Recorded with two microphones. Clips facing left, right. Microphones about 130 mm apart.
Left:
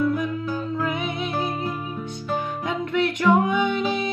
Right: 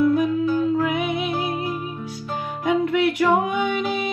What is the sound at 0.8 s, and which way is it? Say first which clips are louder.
Music: right 4 dB; 5° right (ahead or behind).